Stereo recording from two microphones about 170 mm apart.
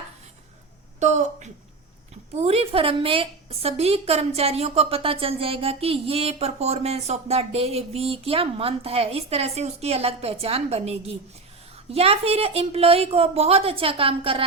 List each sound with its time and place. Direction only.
0.9 s a woman's voice: 45° right (ahead or behind)